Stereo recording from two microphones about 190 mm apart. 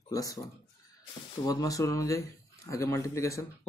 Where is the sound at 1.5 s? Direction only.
20° left (ahead or behind).